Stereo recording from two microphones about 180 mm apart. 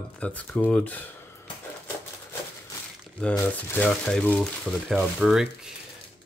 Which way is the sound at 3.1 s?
10° left (ahead or behind).